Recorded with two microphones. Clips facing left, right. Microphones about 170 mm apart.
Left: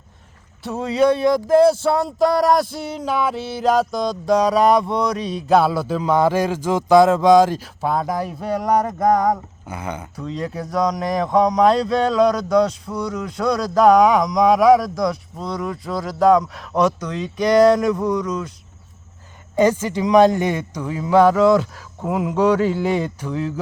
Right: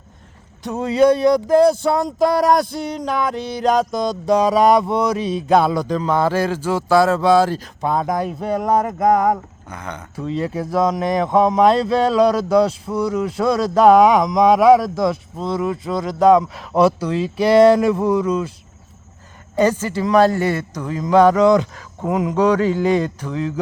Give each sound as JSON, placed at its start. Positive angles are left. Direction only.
{"t": 0.6, "sound": "speech", "side_deg": 0}
{"t": 8.4, "sound": "speech", "side_deg": -20}
{"t": 8.6, "sound": "speech", "side_deg": -5}
{"t": 9.6, "sound": "speech", "side_deg": 5}
{"t": 10.2, "sound": "speech", "side_deg": -5}
{"t": 19.8, "sound": "speech", "side_deg": 15}